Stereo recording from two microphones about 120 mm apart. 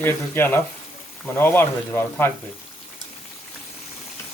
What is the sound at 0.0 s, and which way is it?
Speech, 20° left (ahead or behind).